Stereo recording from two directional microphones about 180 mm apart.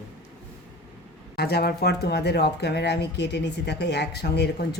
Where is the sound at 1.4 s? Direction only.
60° left (ahead or behind).